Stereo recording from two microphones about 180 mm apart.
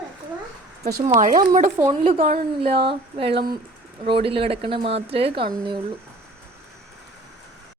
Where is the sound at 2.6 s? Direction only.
30° right (ahead or behind).